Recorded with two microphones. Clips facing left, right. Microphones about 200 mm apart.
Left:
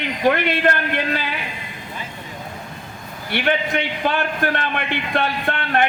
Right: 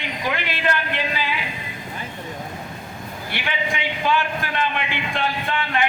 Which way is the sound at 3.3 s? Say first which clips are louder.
Left 7 dB; 55° left (ahead or behind).